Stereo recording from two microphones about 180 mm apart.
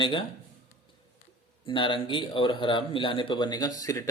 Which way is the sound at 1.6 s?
30° left (ahead or behind).